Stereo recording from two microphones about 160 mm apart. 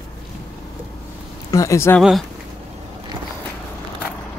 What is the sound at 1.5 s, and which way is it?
Speech, 20° left (ahead or behind).